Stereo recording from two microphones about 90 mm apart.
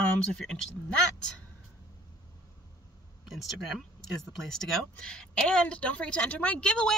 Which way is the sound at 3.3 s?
Centre (ahead or behind).